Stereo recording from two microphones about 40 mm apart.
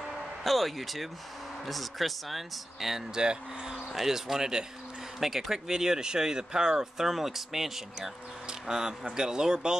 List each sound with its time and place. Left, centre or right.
0.4 s speech: centre
3.2 s speech: centre